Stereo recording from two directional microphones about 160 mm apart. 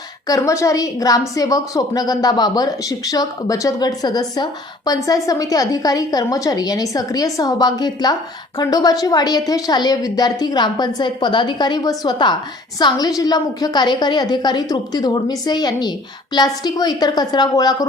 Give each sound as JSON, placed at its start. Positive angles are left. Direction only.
{"t": 0.3, "sound": "a woman's voice", "side_deg": 20}